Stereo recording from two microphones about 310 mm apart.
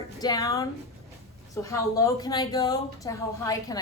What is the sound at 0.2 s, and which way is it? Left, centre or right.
Speech, centre.